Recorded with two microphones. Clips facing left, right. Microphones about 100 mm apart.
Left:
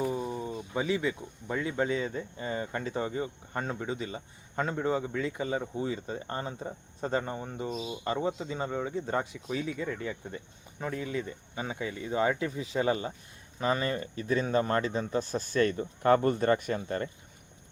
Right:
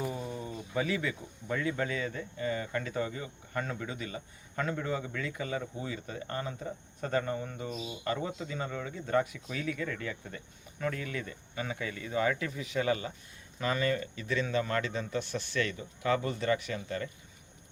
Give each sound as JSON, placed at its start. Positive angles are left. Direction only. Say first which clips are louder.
{"t": 0.0, "sound": "speech", "louder": "left 5 dB", "side_deg": 20}